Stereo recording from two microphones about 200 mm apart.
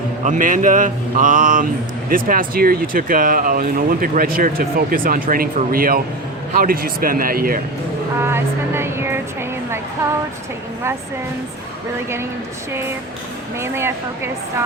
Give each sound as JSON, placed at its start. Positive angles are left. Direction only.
{"t": 0.3, "sound": "speech", "side_deg": -40}
{"t": 8.2, "sound": "speech", "side_deg": -10}
{"t": 13.6, "sound": "speech", "side_deg": -10}